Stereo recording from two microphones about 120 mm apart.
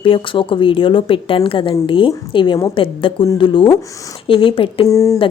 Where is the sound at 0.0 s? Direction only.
45° left (ahead or behind).